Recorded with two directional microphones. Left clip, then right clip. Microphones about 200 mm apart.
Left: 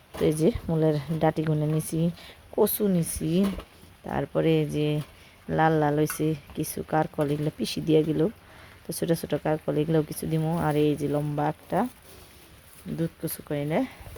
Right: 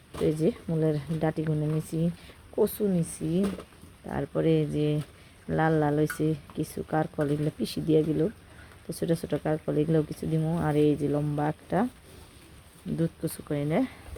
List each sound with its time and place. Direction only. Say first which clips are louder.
0.3 s speech: left 3 dB; 15° left (ahead or behind)
13.0 s speech: even; 5° left (ahead or behind)